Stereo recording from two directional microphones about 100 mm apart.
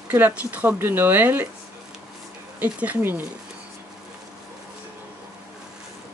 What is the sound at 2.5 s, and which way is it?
Speech, 15° right (ahead or behind).